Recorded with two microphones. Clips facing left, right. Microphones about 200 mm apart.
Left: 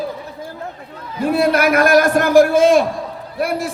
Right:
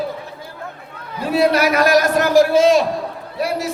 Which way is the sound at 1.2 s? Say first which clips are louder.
Even; 50° left (ahead or behind).